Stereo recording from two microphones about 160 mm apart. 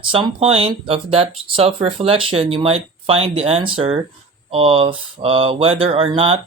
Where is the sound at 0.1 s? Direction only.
35° right (ahead or behind).